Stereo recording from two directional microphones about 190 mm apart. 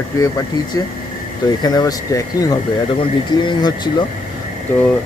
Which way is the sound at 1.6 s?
20° left (ahead or behind).